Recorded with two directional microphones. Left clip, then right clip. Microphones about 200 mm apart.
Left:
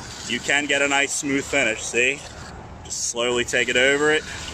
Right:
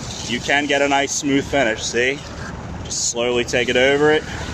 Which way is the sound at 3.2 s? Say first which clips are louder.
Right 2 dB; centre (ahead or behind).